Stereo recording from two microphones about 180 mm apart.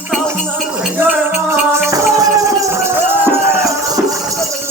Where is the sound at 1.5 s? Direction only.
15° right (ahead or behind).